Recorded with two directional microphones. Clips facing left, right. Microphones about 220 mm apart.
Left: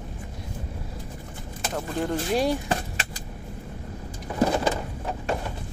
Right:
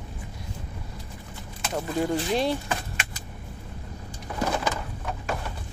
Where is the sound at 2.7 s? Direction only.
35° left (ahead or behind).